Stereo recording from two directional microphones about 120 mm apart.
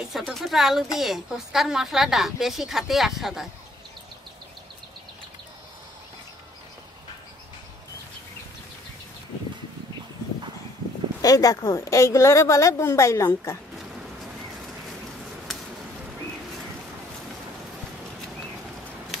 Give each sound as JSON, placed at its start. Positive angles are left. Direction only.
{"t": 0.1, "sound": "a woman's voice", "side_deg": 0}
{"t": 11.2, "sound": "a woman's voice", "side_deg": 30}